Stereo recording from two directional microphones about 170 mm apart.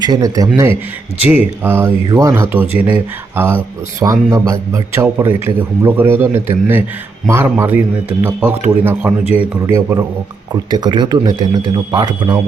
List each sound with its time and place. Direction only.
0.0 s a man's voice: 20° right (ahead or behind)